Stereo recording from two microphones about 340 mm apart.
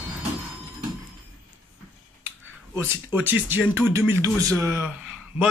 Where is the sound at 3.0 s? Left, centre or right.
Centre.